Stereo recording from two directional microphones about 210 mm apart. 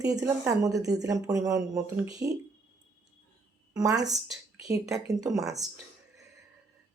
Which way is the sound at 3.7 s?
15° right (ahead or behind).